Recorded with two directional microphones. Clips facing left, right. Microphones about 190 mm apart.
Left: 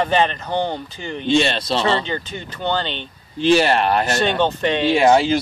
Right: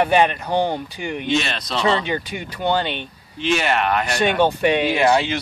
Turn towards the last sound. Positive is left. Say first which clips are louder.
# left 3 dB
turn(degrees=35)  # may be behind; listen again after turning